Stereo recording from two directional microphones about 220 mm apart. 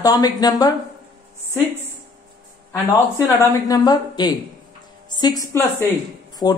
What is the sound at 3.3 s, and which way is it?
A woman's voice, 15° left (ahead or behind).